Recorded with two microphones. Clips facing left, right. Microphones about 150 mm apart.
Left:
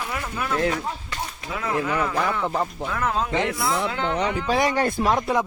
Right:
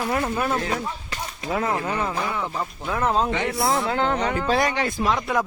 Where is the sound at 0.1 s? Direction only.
45° right (ahead or behind).